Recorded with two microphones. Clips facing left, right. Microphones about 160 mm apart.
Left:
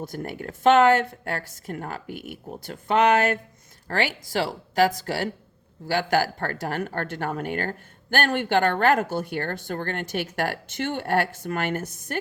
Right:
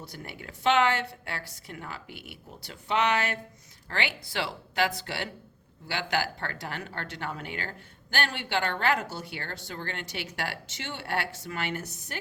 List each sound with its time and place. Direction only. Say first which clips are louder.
0.0 s speech: left 10 dB; 45° left (ahead or behind)